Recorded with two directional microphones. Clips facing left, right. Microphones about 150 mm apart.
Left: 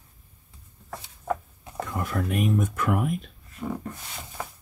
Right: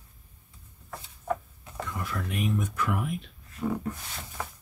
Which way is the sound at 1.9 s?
50° left (ahead or behind).